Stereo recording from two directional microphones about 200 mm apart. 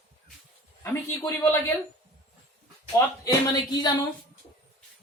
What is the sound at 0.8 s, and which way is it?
Speech, 10° left (ahead or behind).